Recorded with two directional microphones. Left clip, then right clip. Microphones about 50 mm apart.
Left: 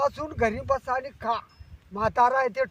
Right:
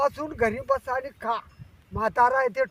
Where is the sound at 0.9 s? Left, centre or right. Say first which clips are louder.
Even; right.